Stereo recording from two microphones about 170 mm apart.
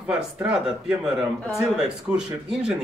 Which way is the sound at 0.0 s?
5° right (ahead or behind).